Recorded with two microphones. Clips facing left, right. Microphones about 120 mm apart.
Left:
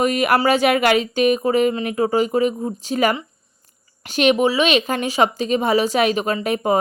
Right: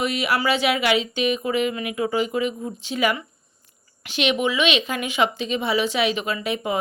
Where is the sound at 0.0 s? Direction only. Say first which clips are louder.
Left 6 dB; 45° left (ahead or behind).